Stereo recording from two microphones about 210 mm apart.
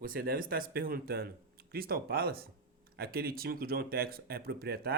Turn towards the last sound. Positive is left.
turn(degrees=-45)  # may be behind; listen again after turning